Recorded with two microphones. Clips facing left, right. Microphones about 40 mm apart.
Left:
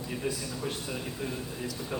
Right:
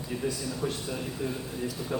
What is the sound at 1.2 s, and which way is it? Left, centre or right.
Speech, left.